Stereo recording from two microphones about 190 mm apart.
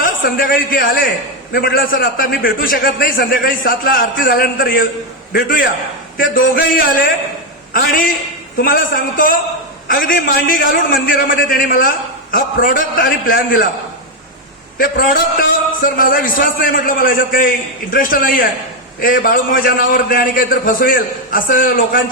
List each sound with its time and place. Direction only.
0.0 s a man's voice: 50° left (ahead or behind)
14.8 s a man's voice: 45° left (ahead or behind)